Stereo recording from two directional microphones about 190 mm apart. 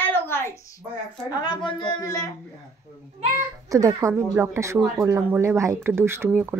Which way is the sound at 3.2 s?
35° right (ahead or behind).